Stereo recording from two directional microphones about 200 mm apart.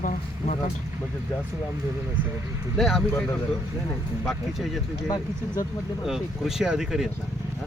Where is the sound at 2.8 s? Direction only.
Centre (ahead or behind).